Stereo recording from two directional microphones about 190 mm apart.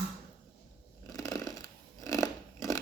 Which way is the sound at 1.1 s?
20° left (ahead or behind).